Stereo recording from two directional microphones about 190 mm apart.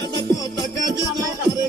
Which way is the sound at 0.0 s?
25° right (ahead or behind).